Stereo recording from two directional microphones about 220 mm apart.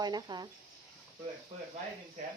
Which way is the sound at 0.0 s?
20° right (ahead or behind).